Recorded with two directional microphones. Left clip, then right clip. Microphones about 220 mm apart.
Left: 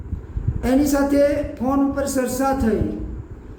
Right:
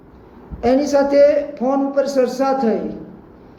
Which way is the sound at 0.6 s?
15° left (ahead or behind).